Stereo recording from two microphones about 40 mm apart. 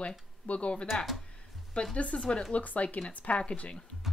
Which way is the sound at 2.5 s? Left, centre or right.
Left.